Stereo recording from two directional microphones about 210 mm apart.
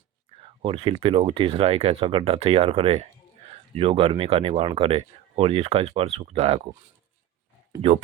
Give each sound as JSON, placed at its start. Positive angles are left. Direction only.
{"t": 0.3, "sound": "speech", "side_deg": -25}
{"t": 7.8, "sound": "speech", "side_deg": -30}